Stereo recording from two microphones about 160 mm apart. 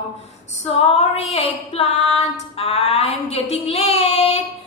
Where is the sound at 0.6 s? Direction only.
40° left (ahead or behind).